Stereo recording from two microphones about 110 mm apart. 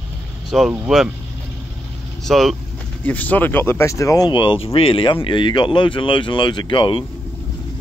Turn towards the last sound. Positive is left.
turn(degrees=50)  # may be behind; listen again after turning